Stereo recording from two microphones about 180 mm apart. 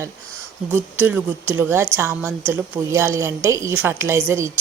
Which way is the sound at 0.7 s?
10° right (ahead or behind).